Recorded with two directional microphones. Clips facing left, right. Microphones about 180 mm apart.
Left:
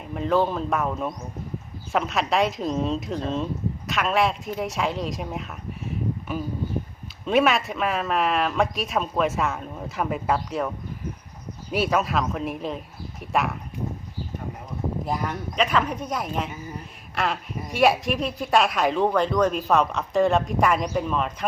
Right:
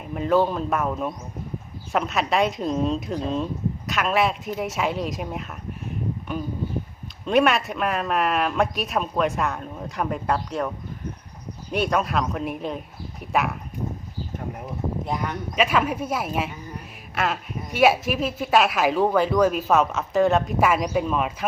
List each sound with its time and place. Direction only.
0.0 s speech: centre (ahead or behind)
11.7 s speech: 5° left (ahead or behind)
15.0 s speech: centre (ahead or behind)